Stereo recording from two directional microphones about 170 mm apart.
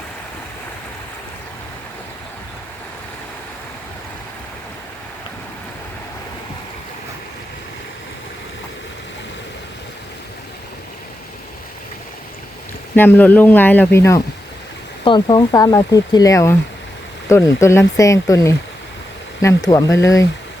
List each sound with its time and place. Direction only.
13.0 s speech: 10° left (ahead or behind)
15.0 s speech: 25° left (ahead or behind)